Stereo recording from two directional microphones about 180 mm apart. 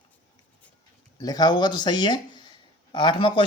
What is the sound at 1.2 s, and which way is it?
Speech, 20° left (ahead or behind).